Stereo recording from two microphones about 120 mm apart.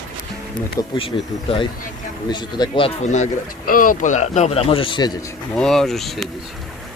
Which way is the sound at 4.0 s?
85° left.